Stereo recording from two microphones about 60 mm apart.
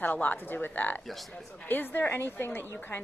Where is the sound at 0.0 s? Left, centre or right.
Left.